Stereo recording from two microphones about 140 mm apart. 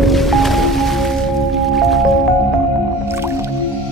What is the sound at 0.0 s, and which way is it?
Music, centre (ahead or behind).